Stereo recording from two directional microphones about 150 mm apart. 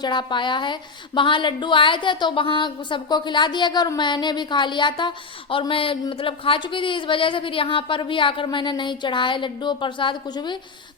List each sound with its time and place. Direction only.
0.0 s a woman's voice: 30° left (ahead or behind)